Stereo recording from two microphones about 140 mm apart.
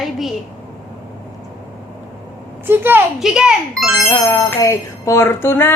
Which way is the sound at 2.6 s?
15° right (ahead or behind).